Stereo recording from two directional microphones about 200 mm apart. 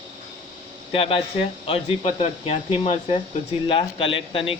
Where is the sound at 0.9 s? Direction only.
25° left (ahead or behind).